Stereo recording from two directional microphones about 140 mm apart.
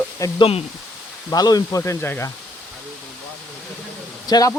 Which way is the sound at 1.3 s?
25° left (ahead or behind).